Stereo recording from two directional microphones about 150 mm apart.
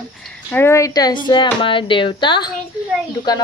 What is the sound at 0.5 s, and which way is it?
A woman's voice, 15° left (ahead or behind).